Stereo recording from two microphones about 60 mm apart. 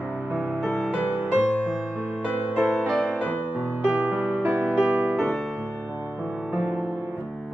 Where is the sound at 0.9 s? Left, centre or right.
Centre.